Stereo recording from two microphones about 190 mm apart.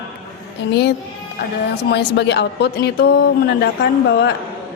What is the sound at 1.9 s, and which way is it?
A woman's voice, 65° left (ahead or behind).